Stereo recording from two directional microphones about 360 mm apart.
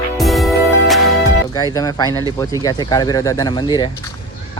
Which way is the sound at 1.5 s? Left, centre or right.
Centre.